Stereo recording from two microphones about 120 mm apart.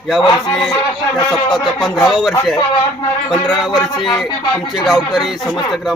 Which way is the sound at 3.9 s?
40° left (ahead or behind).